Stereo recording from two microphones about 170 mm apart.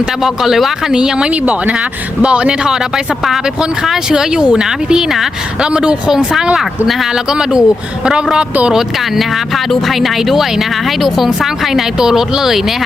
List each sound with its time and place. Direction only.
0.2 s speech: centre (ahead or behind)